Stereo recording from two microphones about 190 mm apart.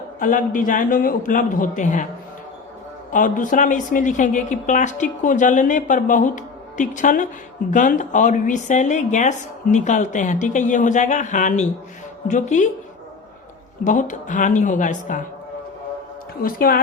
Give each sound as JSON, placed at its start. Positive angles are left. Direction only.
{"t": 0.2, "sound": "a woman's voice", "side_deg": 45}
{"t": 3.1, "sound": "a woman's voice", "side_deg": 45}
{"t": 13.8, "sound": "speech", "side_deg": 40}
{"t": 16.4, "sound": "a woman's voice", "side_deg": 50}